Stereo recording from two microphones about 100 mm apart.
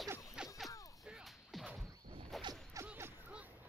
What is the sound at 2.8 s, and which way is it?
Music, 35° right (ahead or behind).